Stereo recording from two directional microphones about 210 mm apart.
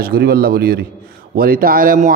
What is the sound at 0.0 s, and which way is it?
A man's voice, 45° right (ahead or behind).